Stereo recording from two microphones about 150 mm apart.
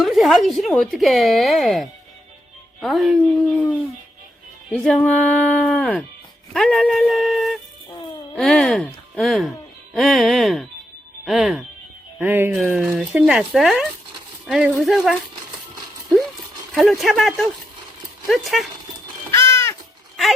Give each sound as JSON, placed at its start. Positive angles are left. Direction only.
{"t": 0.0, "sound": "speech", "side_deg": 0}
{"t": 4.9, "sound": "a sound", "side_deg": 10}
{"t": 6.5, "sound": "speech", "side_deg": 0}
{"t": 12.2, "sound": "speech", "side_deg": -10}
{"t": 16.7, "sound": "speech", "side_deg": 0}
{"t": 19.3, "sound": "crow", "side_deg": 20}